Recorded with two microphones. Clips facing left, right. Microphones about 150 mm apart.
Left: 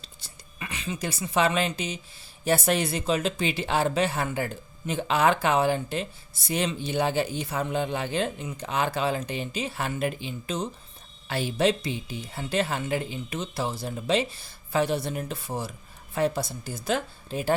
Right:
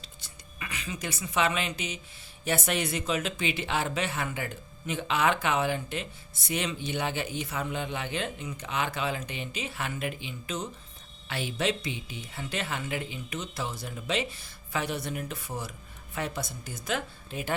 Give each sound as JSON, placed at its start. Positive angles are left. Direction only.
{"t": 0.2, "sound": "speech", "side_deg": 30}